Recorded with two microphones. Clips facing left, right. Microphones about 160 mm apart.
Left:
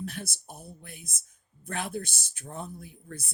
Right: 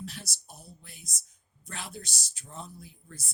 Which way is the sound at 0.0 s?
55° left (ahead or behind).